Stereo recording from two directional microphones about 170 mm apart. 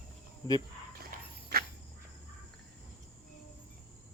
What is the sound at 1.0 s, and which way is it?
Walk, 60° right (ahead or behind).